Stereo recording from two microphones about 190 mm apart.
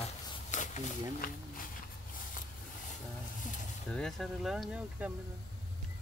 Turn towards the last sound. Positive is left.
turn(degrees=0)  # may be behind; listen again after turning